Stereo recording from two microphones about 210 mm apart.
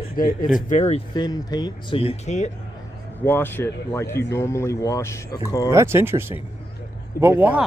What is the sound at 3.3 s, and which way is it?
Speech, 10° left (ahead or behind).